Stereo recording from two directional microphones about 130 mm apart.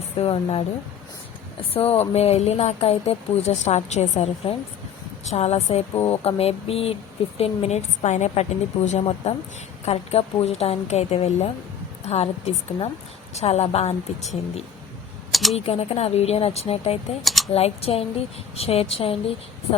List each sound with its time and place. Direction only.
0.2 s speech: 50° left (ahead or behind)
1.7 s a woman's voice: 50° left (ahead or behind)
15.3 s computer keyboard: centre (ahead or behind)
15.5 s speech: 50° left (ahead or behind)
17.2 s speech: centre (ahead or behind)
17.5 s speech: 50° left (ahead or behind)